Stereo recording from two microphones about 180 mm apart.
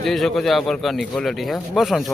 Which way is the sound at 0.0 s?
Centre (ahead or behind).